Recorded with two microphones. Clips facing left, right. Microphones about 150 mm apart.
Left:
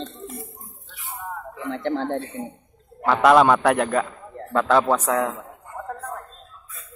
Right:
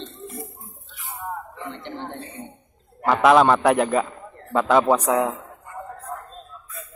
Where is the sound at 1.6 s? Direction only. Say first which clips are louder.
Left 8 dB; 90° left.